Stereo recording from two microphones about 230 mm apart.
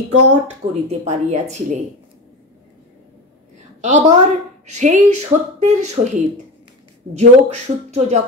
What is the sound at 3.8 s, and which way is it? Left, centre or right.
Speech, right.